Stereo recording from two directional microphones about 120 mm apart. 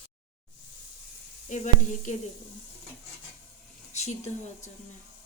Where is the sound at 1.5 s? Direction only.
90° left.